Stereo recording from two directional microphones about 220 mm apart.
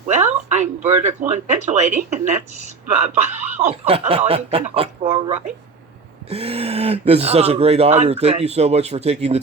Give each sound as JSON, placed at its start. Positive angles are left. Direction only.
{"t": 0.1, "sound": "speech", "side_deg": -30}